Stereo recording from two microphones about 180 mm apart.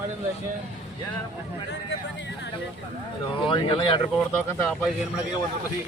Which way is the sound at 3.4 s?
25° left (ahead or behind).